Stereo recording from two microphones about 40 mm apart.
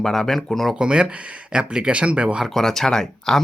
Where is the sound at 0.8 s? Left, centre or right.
Right.